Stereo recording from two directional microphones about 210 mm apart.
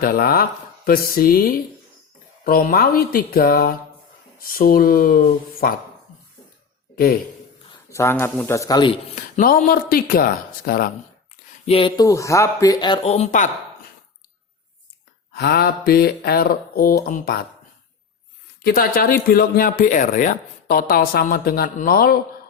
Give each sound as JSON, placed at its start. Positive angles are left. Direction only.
{"t": 0.0, "sound": "speech", "side_deg": 45}
{"t": 6.9, "sound": "speech", "side_deg": 45}
{"t": 7.7, "sound": "a sound", "side_deg": 15}
{"t": 8.2, "sound": "speech", "side_deg": 10}
{"t": 9.1, "sound": "speech", "side_deg": 40}
{"t": 11.6, "sound": "speech", "side_deg": 25}
{"t": 13.1, "sound": "speech", "side_deg": 35}
{"t": 15.3, "sound": "speech", "side_deg": 50}
{"t": 18.6, "sound": "speech", "side_deg": 45}